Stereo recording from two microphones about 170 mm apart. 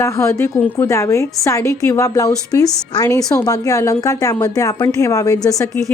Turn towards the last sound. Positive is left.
turn(degrees=20)  # may be behind; listen again after turning